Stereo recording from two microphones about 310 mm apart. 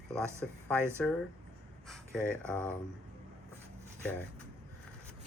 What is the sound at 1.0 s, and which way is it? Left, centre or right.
Speech, centre.